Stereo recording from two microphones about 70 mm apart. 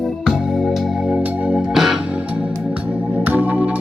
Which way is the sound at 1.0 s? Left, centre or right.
Centre.